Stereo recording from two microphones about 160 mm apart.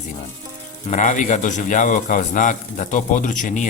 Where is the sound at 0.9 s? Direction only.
50° left (ahead or behind).